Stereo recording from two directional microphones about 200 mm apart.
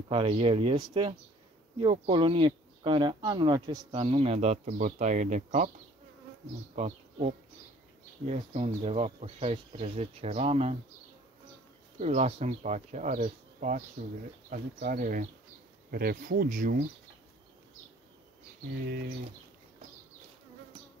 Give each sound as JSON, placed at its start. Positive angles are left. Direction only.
{"t": 0.1, "sound": "speech", "side_deg": -25}
{"t": 6.7, "sound": "speech", "side_deg": -30}
{"t": 12.0, "sound": "speech", "side_deg": -30}